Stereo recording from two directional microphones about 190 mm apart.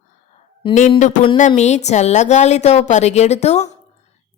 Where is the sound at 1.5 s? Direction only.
35° left (ahead or behind).